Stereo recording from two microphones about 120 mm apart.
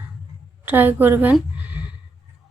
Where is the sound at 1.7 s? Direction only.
15° right (ahead or behind).